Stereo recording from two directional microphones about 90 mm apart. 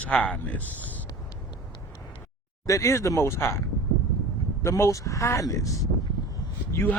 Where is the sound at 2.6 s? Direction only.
35° left (ahead or behind).